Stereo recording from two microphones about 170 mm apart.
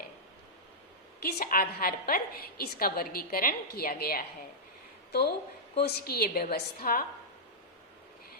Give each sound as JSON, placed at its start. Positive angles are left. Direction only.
{"t": 1.2, "sound": "a woman's voice", "side_deg": 60}
{"t": 5.7, "sound": "a woman's voice", "side_deg": 65}